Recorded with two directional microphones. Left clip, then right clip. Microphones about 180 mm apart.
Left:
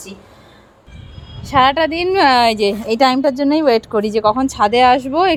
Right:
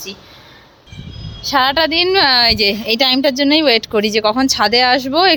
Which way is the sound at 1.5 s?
5° left (ahead or behind).